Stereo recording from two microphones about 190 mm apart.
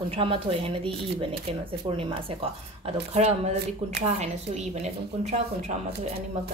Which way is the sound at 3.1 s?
35° right (ahead or behind).